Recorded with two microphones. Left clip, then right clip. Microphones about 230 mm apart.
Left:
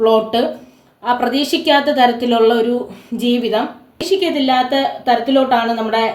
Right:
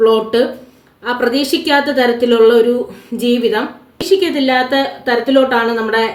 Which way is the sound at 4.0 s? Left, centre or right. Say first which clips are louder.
Right 3 dB; centre.